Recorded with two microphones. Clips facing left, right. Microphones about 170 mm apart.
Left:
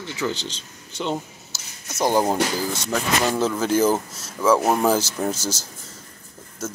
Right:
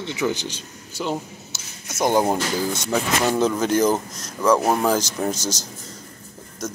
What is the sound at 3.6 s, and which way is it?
Speech, 5° left (ahead or behind).